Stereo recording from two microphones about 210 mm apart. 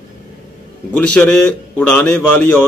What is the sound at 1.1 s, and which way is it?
A man's voice, 5° left (ahead or behind).